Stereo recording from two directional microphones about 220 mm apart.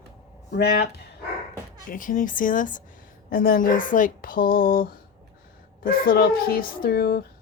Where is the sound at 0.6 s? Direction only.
45° left (ahead or behind).